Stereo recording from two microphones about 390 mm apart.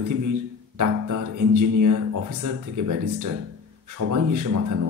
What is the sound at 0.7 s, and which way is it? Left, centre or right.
Music, right.